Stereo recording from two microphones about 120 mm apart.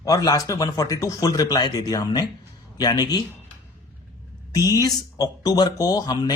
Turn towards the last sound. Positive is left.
turn(degrees=30)  # may be behind; listen again after turning